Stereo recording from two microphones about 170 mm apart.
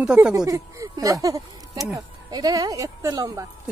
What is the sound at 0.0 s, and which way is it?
Speech, 5° right (ahead or behind).